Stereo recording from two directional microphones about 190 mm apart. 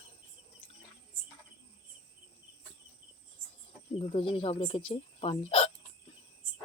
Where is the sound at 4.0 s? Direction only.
30° left (ahead or behind).